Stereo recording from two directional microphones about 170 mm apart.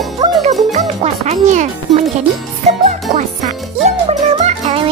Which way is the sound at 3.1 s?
40° right (ahead or behind).